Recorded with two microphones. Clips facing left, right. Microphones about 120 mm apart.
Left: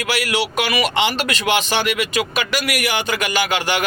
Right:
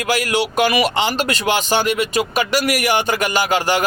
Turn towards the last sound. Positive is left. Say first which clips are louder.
# right 3 dB
turn(degrees=-40)  # may be behind; listen again after turning